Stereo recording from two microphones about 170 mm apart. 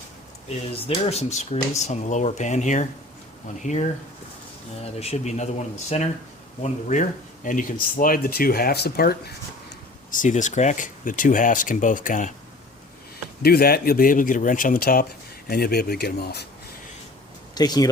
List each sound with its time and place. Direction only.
0.9 s speech: 35° left (ahead or behind)
4.9 s speech: 40° left (ahead or behind); by 9.3 s 70° left (ahead or behind)
10.1 s speech: 50° left (ahead or behind)
13.4 s speech: 65° left (ahead or behind)
17.5 s speech: 25° left (ahead or behind)